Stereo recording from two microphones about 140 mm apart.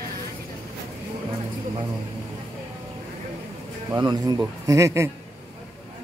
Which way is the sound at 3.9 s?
30° right (ahead or behind).